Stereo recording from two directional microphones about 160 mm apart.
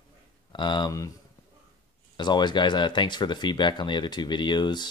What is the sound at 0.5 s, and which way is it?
Speech, 30° left (ahead or behind).